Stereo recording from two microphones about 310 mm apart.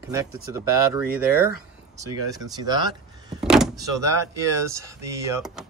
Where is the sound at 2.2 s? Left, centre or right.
Centre.